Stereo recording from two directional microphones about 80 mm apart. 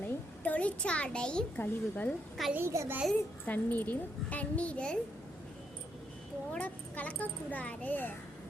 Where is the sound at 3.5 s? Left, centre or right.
Left.